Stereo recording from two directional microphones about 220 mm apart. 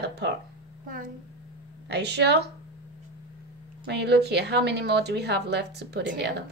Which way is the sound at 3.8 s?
50° right (ahead or behind).